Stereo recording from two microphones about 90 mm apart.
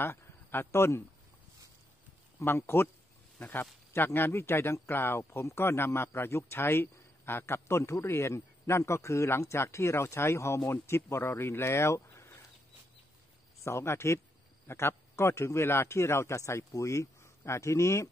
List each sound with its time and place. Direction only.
0.0 s a man's voice: 25° left (ahead or behind)
2.3 s speech: 25° left (ahead or behind)
13.7 s a man's voice: 30° left (ahead or behind)